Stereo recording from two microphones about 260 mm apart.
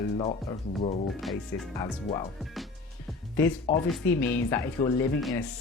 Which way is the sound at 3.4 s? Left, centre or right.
Centre.